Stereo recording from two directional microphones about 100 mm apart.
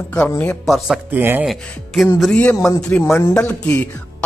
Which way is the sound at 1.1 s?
20° right (ahead or behind).